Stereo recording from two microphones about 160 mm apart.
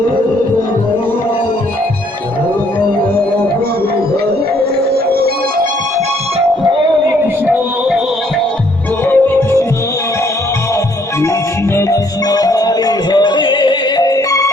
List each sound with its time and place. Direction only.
7.4 s music: 5° right (ahead or behind)
9.0 s music: 10° left (ahead or behind)
11.8 s music: 20° left (ahead or behind)